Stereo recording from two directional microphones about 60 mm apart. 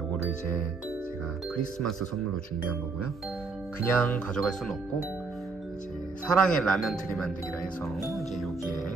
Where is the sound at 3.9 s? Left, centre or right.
Left; by 4.8 s centre.